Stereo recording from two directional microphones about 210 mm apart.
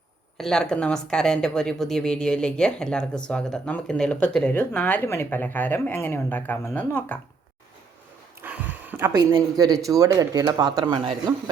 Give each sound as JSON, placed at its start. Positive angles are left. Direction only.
{"t": 0.3, "sound": "speech", "side_deg": 0}
{"t": 8.4, "sound": "a sound", "side_deg": -10}
{"t": 9.8, "sound": "speech", "side_deg": -15}